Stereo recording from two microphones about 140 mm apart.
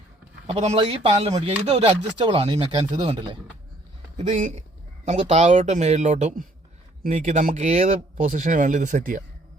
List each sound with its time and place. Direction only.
0.5 s speech: 50° right (ahead or behind); by 3.2 s 35° right (ahead or behind)
4.2 s speech: 65° right (ahead or behind)
5.0 s speech: 50° right (ahead or behind); by 9.2 s 70° right (ahead or behind)